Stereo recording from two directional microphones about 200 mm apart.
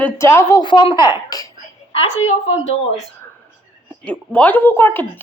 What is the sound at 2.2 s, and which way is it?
Speech, 80° left.